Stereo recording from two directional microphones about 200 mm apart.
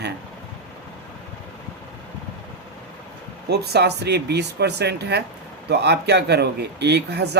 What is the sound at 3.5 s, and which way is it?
Speech, 55° right (ahead or behind).